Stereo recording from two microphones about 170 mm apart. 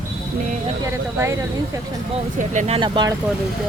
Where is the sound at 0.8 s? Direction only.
15° right (ahead or behind).